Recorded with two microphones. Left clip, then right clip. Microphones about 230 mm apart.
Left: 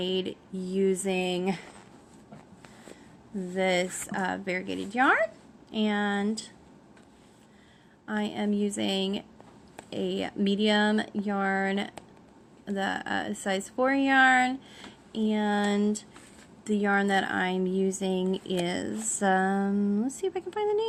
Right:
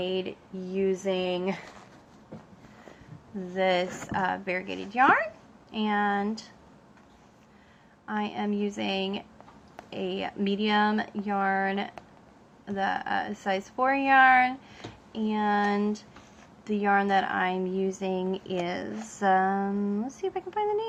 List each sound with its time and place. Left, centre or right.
0.0 s speech: left
3.5 s speech: left
8.0 s speech: left